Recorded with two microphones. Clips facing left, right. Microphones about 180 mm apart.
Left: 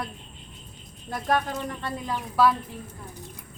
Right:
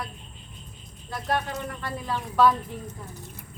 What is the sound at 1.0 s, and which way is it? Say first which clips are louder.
Speech: left 3 dB; 50° left (ahead or behind).